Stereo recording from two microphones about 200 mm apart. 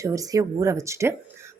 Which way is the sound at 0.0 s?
15° right (ahead or behind).